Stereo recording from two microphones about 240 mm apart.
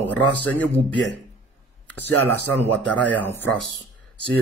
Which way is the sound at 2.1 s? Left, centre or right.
Right.